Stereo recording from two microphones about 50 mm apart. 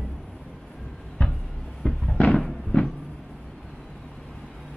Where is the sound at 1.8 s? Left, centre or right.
Centre.